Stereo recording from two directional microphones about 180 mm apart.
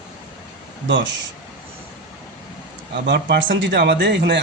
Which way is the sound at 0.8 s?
80° right.